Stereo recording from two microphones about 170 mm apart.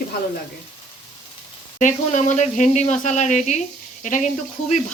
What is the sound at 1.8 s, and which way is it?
Speech, 45° left (ahead or behind).